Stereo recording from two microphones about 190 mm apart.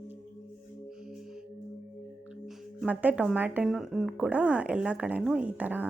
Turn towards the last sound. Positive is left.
turn(degrees=-10)  # may be behind; listen again after turning